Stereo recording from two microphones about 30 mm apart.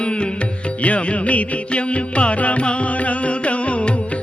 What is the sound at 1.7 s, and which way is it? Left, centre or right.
Music, left.